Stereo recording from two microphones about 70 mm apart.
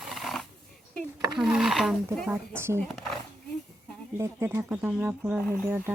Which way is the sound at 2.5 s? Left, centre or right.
Right.